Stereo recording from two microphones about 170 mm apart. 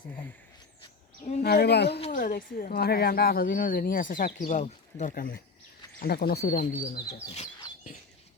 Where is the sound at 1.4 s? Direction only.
70° left (ahead or behind).